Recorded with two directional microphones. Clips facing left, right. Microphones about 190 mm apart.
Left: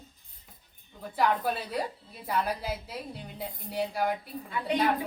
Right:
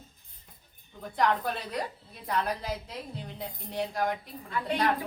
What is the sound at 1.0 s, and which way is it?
A woman's voice, 5° left (ahead or behind).